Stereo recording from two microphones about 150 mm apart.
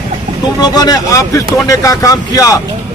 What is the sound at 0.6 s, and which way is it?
Speech, 25° left (ahead or behind).